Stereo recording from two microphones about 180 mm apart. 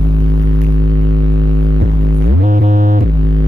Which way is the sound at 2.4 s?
45° right (ahead or behind).